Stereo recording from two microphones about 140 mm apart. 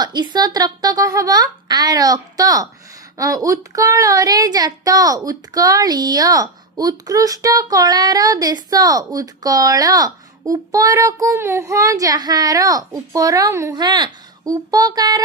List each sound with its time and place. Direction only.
0.0 s speech: 30° right (ahead or behind)